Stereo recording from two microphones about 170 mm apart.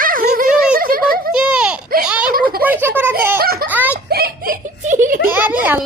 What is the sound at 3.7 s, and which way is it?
Speech, 10° right (ahead or behind).